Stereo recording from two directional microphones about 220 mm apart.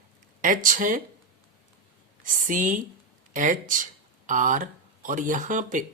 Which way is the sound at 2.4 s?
35° right (ahead or behind).